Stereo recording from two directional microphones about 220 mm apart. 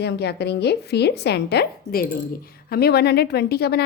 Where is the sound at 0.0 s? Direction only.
50° left (ahead or behind).